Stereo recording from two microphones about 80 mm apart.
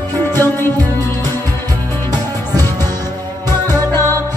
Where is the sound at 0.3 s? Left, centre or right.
Left.